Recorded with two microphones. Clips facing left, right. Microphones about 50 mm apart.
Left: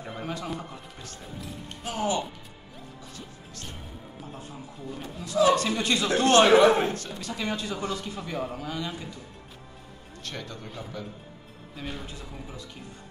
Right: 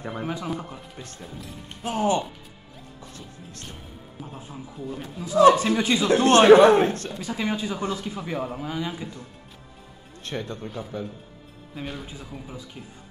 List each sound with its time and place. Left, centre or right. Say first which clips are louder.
0.1 s a man's voice: right 3 dB; centre
1.9 s a man's voice: right 5 dB; right
4.2 s a man's voice: right 4 dB; centre
6.0 s a man's voice: right 5 dB; right
7.1 s a man's voice: right 4 dB; centre
10.2 s a man's voice: right 6 dB; right
11.8 s a man's voice: right 2 dB; centre